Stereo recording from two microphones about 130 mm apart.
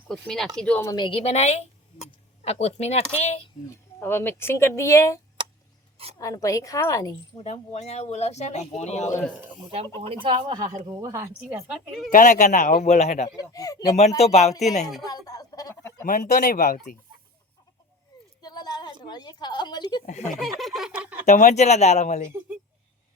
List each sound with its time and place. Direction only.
0.1 s speech: centre (ahead or behind)
0.9 s speech: 35° left (ahead or behind); by 3.5 s 55° left (ahead or behind)
4.0 s speech: 20° left (ahead or behind)
7.3 s speech: 55° left (ahead or behind)
10.0 s speech: 40° right (ahead or behind); by 11.6 s 20° right (ahead or behind)
12.1 s speech: 75° left (ahead or behind)
13.5 s speech: 25° left (ahead or behind)
14.2 s speech: 55° left (ahead or behind)
15.0 s speech: 30° left (ahead or behind)
15.7 s chicken: 20° left (ahead or behind)
16.0 s speech: 90° left
18.4 s a woman's voice: 30° left (ahead or behind)
20.3 s speech: centre (ahead or behind)
21.2 s speech: 65° left (ahead or behind)